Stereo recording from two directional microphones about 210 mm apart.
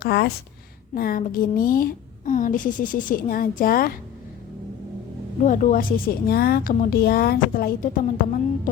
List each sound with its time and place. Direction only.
0.0 s a woman's voice: 50° left (ahead or behind)
5.4 s a woman's voice: 35° left (ahead or behind)